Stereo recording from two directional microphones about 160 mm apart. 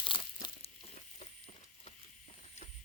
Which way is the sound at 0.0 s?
30° left (ahead or behind).